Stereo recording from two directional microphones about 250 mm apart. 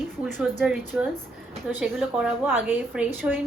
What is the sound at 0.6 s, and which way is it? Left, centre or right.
A woman's voice, centre.